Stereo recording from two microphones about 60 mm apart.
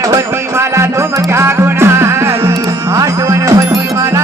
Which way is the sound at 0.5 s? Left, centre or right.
Right.